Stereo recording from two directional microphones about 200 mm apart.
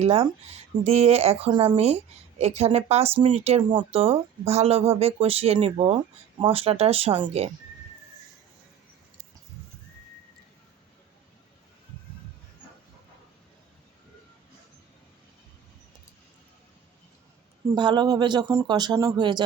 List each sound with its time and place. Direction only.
0.0 s speech: 30° right (ahead or behind)
17.7 s speech: 20° right (ahead or behind)